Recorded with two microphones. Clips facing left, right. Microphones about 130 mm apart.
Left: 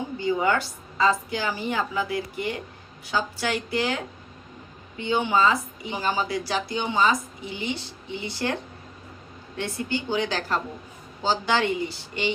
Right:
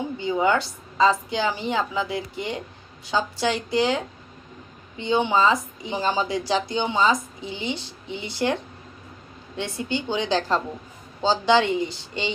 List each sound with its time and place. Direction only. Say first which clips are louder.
0.2 s speech: right 1 dB; 20° right (ahead or behind)
9.6 s speech: right 1 dB; 20° right (ahead or behind)